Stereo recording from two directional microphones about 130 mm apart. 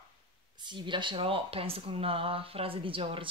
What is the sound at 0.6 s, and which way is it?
Speech, 35° right (ahead or behind).